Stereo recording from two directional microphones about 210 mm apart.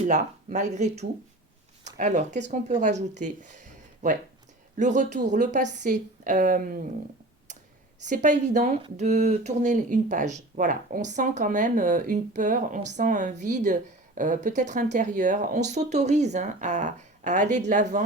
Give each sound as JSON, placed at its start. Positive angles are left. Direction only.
{"t": 0.0, "sound": "speech", "side_deg": -35}
{"t": 8.0, "sound": "speech", "side_deg": -35}